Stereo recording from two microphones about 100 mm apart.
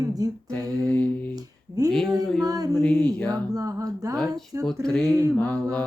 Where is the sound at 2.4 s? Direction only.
40° right (ahead or behind).